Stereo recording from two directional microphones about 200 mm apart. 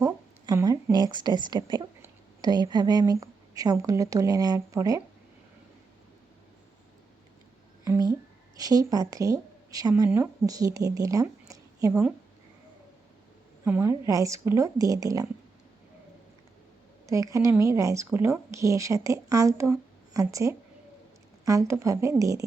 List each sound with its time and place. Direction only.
0.0 s a woman's voice: 15° right (ahead or behind)
7.9 s a sound: 15° right (ahead or behind)
8.5 s a woman's voice: 20° right (ahead or behind)
13.7 s speech: 10° right (ahead or behind)
17.1 s speech: 15° right (ahead or behind)